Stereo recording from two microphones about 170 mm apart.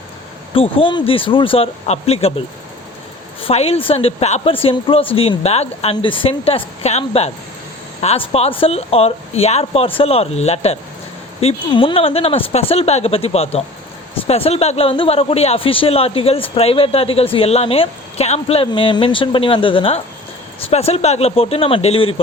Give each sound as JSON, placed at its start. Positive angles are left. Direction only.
{"t": 0.5, "sound": "a man's voice", "side_deg": 30}
{"t": 3.4, "sound": "a man's voice", "side_deg": 35}